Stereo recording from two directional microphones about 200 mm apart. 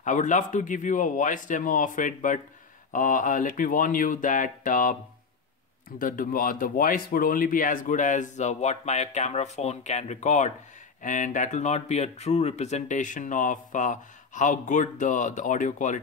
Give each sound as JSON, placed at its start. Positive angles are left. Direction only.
{"t": 0.0, "sound": "speech", "side_deg": 40}